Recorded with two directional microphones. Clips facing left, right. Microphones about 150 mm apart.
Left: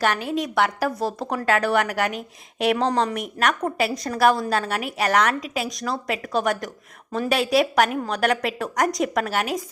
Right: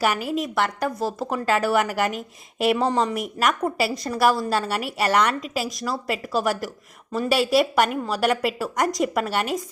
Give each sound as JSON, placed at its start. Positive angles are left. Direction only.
{"t": 0.0, "sound": "a woman's voice", "side_deg": -5}